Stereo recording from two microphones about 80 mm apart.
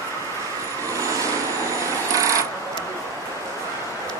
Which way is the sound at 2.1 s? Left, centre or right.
Right.